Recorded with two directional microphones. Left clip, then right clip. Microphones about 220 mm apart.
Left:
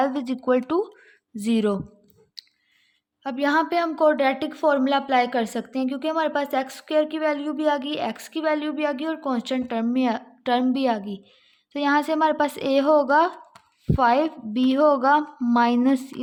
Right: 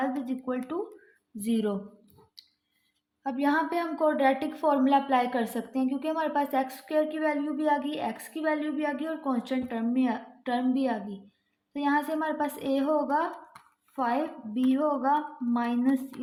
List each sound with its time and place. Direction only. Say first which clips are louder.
0.0 s speech: left 7 dB; 50° left (ahead or behind)
1.4 s a woman's voice: left 6 dB; 35° left (ahead or behind)
2.4 s clicking: left 10 dB; 35° left (ahead or behind)
3.2 s a woman's voice: left 5 dB; 40° left (ahead or behind)